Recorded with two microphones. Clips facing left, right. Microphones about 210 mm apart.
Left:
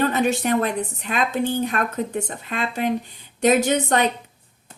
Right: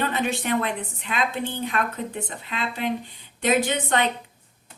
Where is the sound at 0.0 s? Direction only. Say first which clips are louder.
Left 5 dB; 45° left (ahead or behind).